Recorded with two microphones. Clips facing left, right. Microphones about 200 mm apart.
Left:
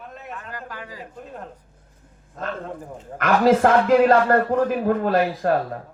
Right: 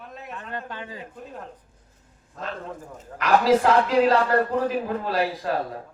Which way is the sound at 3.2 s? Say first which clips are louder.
Left 2 dB; 50° left (ahead or behind).